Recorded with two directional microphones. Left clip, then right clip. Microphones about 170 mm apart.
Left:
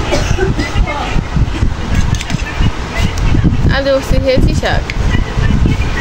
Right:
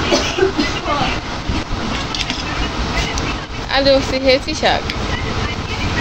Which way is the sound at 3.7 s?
15° left (ahead or behind).